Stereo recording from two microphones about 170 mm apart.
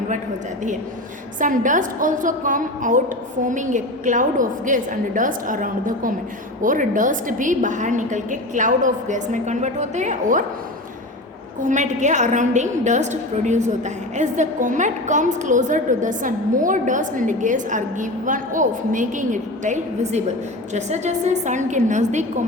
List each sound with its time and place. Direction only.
1.4 s a woman's voice: 50° right (ahead or behind)
11.6 s a woman's voice: 45° right (ahead or behind)